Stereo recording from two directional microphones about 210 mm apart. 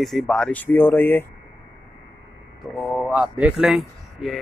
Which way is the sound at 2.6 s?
Centre (ahead or behind).